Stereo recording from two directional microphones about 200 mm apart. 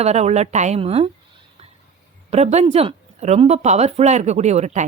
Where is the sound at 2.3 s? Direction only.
35° right (ahead or behind).